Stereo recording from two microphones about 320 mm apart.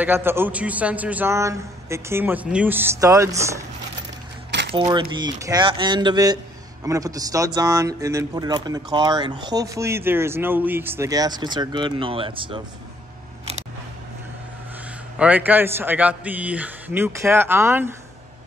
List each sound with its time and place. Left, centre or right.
0.0 s speech: centre
4.5 s a sound: right
4.7 s speech: centre
15.1 s a man's voice: centre